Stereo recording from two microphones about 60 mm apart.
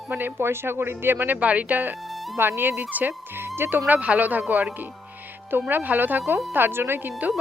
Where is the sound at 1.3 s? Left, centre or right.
Right.